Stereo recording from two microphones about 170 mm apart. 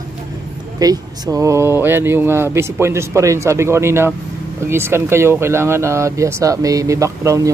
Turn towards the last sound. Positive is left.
turn(degrees=-20)  # may be behind; listen again after turning